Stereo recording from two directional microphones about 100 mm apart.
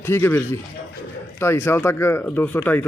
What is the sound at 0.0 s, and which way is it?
Speech, 25° left (ahead or behind).